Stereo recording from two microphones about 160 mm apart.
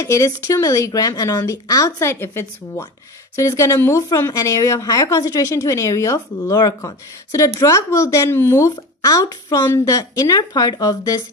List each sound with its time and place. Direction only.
0.0 s a woman's voice: 20° left (ahead or behind)